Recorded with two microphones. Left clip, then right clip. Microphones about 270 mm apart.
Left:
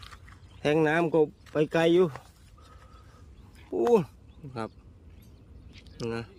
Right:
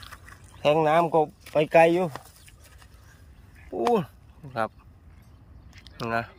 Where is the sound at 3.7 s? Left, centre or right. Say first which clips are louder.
Left 1 dB; centre.